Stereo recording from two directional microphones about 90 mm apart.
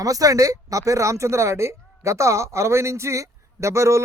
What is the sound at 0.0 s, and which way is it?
Speech, 40° right (ahead or behind).